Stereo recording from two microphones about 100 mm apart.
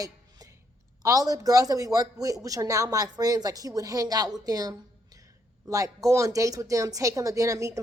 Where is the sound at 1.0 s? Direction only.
35° right (ahead or behind).